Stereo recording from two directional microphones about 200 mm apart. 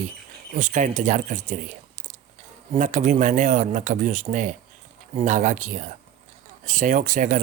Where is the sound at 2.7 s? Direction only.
40° right (ahead or behind).